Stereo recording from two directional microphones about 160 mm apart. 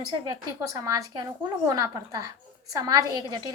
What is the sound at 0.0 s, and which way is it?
Speech, 25° right (ahead or behind).